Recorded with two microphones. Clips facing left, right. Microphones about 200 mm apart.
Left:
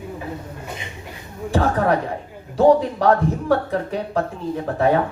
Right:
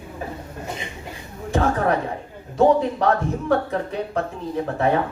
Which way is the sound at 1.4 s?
35° left (ahead or behind).